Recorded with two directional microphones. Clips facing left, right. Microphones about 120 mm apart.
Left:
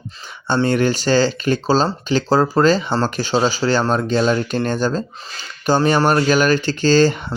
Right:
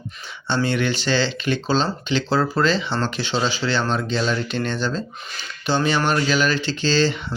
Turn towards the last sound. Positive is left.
turn(degrees=45)  # may be behind; listen again after turning